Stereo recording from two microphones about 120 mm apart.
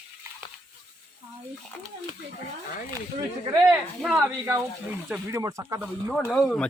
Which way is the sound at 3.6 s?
5° right (ahead or behind).